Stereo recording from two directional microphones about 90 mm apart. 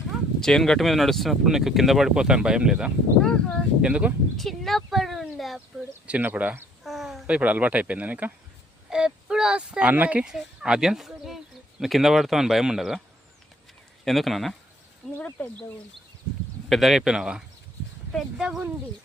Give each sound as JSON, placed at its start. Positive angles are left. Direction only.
{"t": 0.3, "sound": "speech", "side_deg": 5}
{"t": 3.2, "sound": "speech", "side_deg": 10}
{"t": 3.8, "sound": "speech", "side_deg": -10}
{"t": 4.4, "sound": "a sound", "side_deg": 0}
{"t": 6.1, "sound": "speech", "side_deg": -15}
{"t": 6.8, "sound": "a sound", "side_deg": 0}
{"t": 7.3, "sound": "speech", "side_deg": -15}
{"t": 14.0, "sound": "speech", "side_deg": 0}
{"t": 15.2, "sound": "speech", "side_deg": 15}
{"t": 16.6, "sound": "speech", "side_deg": 0}